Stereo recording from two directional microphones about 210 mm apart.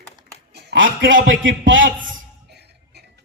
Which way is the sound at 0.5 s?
60° right (ahead or behind).